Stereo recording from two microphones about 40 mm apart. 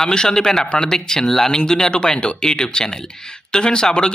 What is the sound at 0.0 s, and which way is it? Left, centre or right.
Speech, centre.